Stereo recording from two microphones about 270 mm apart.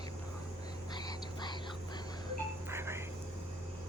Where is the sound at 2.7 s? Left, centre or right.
Centre.